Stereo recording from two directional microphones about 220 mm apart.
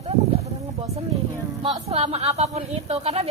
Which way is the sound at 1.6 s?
25° right (ahead or behind).